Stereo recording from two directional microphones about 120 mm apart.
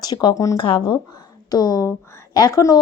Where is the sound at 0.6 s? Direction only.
45° left (ahead or behind).